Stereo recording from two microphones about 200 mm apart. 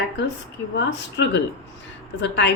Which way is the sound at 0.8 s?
60° left (ahead or behind).